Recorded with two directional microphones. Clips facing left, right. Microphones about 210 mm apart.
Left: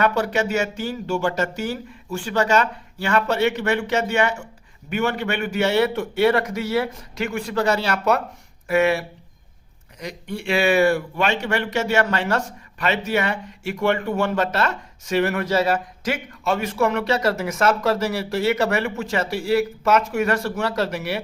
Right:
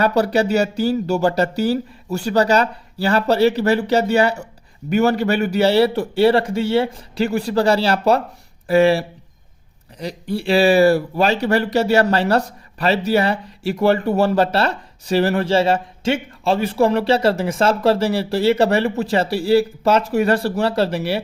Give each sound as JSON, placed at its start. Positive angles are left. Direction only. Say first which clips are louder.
{"t": 0.0, "sound": "speech", "louder": "right 4 dB", "side_deg": -35}